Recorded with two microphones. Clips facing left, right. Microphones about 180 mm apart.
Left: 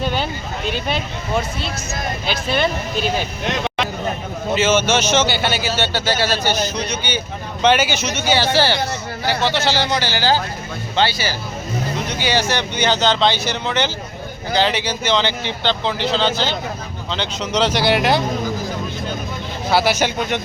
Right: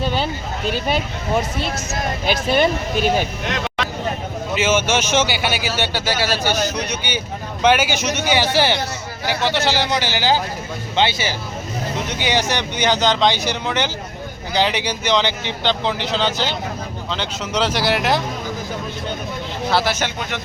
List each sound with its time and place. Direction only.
0.0 s a sound: centre (ahead or behind)
0.7 s speech: 10° right (ahead or behind)
4.5 s speech: 15° right (ahead or behind)
19.7 s speech: 10° left (ahead or behind)